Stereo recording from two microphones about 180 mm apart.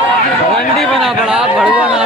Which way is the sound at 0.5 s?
Centre (ahead or behind).